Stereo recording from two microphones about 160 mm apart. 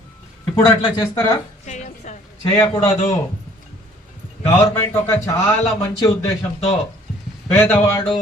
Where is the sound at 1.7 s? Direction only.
50° left (ahead or behind).